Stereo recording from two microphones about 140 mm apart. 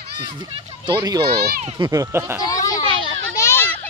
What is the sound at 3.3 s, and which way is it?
Children playing, 20° left (ahead or behind).